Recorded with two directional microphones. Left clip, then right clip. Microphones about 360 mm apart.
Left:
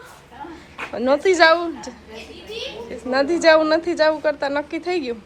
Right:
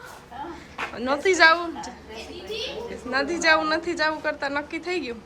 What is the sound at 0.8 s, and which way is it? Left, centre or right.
A woman's voice, centre.